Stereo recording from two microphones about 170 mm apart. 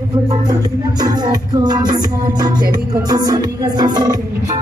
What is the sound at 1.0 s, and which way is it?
Music, 25° right (ahead or behind).